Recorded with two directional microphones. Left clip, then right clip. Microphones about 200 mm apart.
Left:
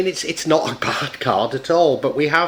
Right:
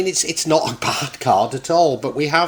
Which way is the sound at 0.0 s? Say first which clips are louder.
Right 1 dB; 25° right (ahead or behind).